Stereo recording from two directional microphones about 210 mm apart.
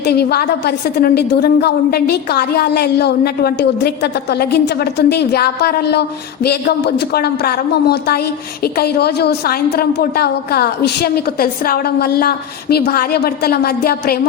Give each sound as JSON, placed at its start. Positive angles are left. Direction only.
{"t": 0.0, "sound": "a woman's voice", "side_deg": 50}